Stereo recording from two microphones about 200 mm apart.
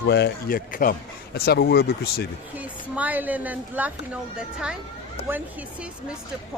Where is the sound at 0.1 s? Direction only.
50° left (ahead or behind).